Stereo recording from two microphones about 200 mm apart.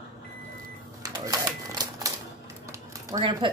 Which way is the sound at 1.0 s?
20° right (ahead or behind).